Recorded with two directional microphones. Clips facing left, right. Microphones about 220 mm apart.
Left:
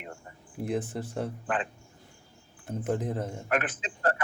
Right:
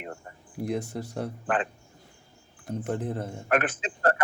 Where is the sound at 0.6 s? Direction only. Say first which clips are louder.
Right 1 dB; centre (ahead or behind).